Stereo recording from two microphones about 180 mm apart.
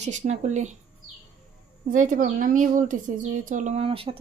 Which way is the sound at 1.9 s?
45° right (ahead or behind).